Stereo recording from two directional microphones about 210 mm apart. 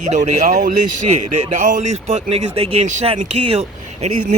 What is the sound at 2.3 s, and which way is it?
Speech, 30° right (ahead or behind).